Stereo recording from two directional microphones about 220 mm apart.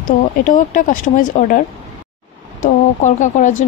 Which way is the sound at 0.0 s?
35° left (ahead or behind).